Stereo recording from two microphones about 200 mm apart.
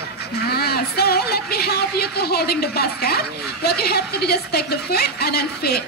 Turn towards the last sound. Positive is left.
turn(degrees=50)  # may be behind; listen again after turning